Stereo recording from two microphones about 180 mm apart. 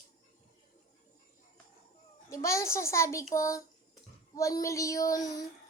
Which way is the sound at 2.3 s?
15° left (ahead or behind).